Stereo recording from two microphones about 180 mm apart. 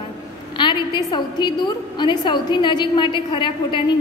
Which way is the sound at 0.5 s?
25° left (ahead or behind).